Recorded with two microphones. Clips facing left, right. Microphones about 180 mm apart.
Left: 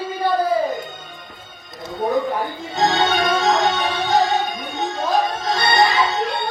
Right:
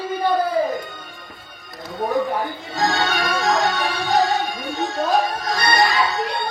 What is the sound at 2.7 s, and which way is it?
Music, 20° left (ahead or behind).